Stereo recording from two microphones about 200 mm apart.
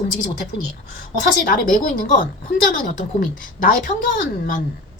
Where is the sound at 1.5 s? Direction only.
45° left (ahead or behind).